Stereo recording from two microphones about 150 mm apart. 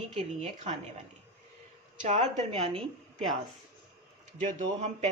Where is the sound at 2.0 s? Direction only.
50° right (ahead or behind).